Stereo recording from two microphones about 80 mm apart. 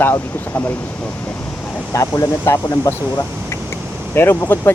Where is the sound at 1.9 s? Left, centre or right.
Left.